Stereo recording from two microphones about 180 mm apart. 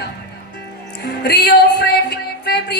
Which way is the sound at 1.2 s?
65° left (ahead or behind).